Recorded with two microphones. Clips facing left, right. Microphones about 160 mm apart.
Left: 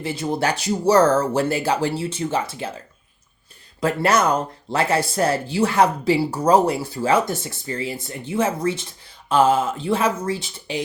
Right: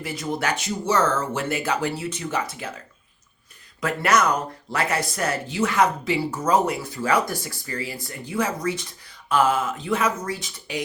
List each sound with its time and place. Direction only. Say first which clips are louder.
0.0 s speech: left 4 dB; 30° left (ahead or behind)
3.8 s speech: left 2 dB; 30° left (ahead or behind)